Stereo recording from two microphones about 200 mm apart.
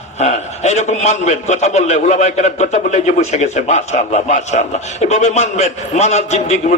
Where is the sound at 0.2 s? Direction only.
35° left (ahead or behind).